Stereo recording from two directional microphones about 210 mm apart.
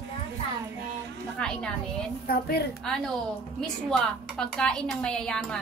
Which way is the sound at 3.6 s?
Centre (ahead or behind).